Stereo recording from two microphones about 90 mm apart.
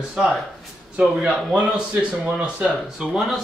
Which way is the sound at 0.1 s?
5° right (ahead or behind).